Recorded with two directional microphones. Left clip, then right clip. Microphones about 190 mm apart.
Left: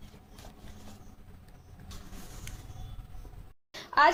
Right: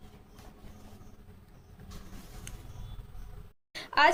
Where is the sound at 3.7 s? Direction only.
25° right (ahead or behind).